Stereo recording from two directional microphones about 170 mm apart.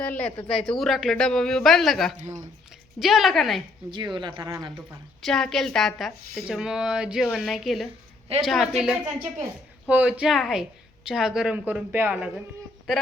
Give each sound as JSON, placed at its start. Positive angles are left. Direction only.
{"t": 0.0, "sound": "a woman's voice", "side_deg": 10}
{"t": 3.9, "sound": "speech", "side_deg": -25}
{"t": 5.2, "sound": "a woman's voice", "side_deg": 0}